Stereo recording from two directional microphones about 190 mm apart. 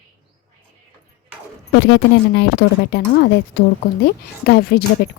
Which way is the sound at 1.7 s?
65° left (ahead or behind).